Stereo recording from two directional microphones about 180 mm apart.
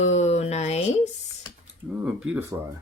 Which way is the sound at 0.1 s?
40° left (ahead or behind).